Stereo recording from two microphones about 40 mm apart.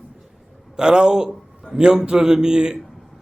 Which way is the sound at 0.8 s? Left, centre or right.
Centre.